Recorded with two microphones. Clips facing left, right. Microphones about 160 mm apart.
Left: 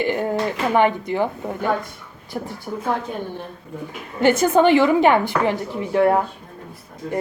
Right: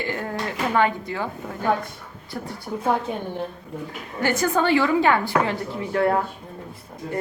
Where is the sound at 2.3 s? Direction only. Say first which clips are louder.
Left 4 dB; 25° left (ahead or behind).